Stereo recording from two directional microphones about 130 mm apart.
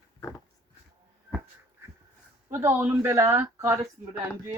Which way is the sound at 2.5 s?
15° right (ahead or behind).